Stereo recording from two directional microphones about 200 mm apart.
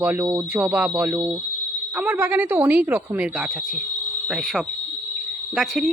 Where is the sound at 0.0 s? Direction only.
10° right (ahead or behind).